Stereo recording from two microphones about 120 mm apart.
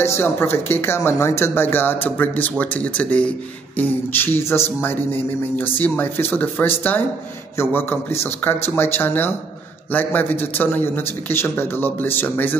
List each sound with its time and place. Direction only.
0.0 s a man's voice: 20° left (ahead or behind)